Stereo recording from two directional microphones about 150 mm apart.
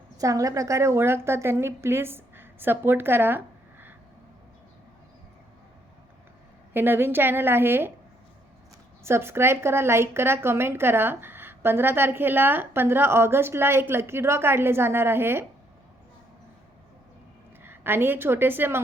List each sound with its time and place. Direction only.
0.2 s a woman's voice: 20° right (ahead or behind)
6.7 s a woman's voice: 15° right (ahead or behind)
9.0 s a woman's voice: 15° right (ahead or behind)
17.6 s a woman's voice: 15° right (ahead or behind)